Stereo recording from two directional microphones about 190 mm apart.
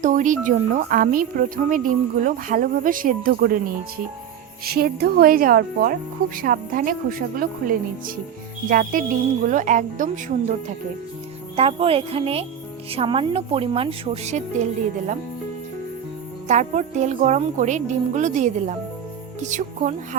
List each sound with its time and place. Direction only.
0.0 s a woman's voice: 40° right (ahead or behind)
11.5 s a woman's voice: 30° right (ahead or behind)
16.5 s a woman's voice: 40° right (ahead or behind)